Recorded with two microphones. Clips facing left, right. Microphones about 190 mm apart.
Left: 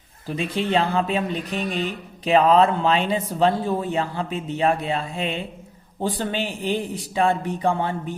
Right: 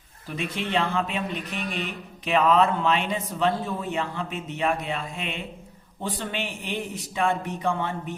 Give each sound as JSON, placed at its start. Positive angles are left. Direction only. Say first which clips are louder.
{"t": 0.3, "sound": "speech", "louder": "left 6 dB", "side_deg": 30}